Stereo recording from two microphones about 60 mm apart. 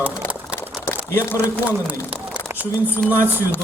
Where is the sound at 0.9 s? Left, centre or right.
Left.